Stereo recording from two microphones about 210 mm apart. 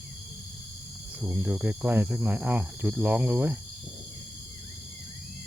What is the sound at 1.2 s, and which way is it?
Speech, 10° right (ahead or behind).